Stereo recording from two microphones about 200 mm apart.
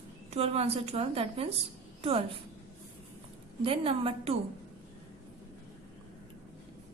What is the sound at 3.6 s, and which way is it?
Speech, 25° right (ahead or behind).